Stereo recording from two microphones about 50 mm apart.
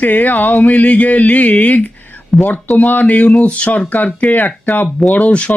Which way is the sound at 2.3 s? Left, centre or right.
Centre.